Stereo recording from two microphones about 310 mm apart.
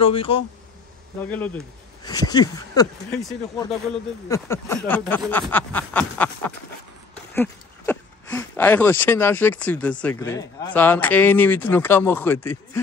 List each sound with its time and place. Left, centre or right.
0.0 s speech: centre
1.2 s snicker: centre
2.0 s speech: centre
4.3 s snicker: centre
7.3 s a sound: centre
10.0 s speech: centre